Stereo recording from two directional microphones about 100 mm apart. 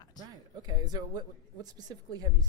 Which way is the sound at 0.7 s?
45° right (ahead or behind).